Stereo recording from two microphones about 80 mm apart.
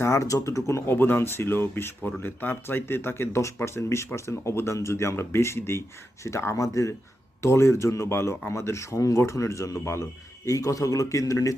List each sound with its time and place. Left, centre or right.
0.0 s speech: left